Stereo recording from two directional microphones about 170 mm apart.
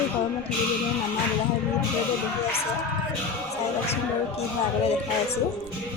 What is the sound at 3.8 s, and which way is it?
Speech, 35° left (ahead or behind).